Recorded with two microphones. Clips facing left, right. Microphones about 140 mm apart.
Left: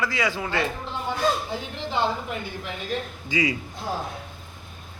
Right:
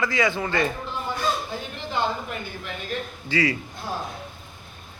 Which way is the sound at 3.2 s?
15° left (ahead or behind).